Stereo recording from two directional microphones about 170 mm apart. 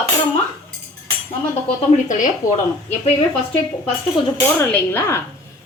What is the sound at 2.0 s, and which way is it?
Speech, 50° left (ahead or behind).